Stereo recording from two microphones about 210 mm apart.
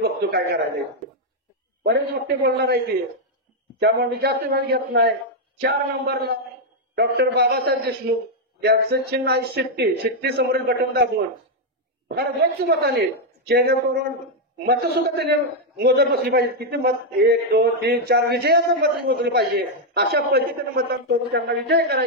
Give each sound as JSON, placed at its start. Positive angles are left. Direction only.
{"t": 0.0, "sound": "a sound", "side_deg": -50}
{"t": 1.8, "sound": "a man's voice", "side_deg": -50}
{"t": 12.1, "sound": "a man's voice", "side_deg": -50}